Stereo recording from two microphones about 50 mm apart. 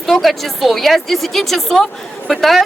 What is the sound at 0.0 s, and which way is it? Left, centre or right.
A woman's voice, centre.